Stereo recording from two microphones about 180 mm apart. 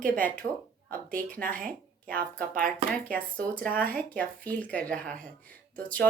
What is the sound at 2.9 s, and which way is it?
Speech, 5° left (ahead or behind).